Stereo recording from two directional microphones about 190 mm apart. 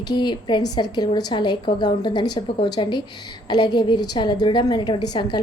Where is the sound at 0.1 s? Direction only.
25° left (ahead or behind).